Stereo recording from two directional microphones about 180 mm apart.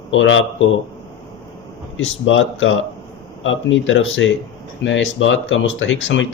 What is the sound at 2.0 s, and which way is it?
Speech, 90° left.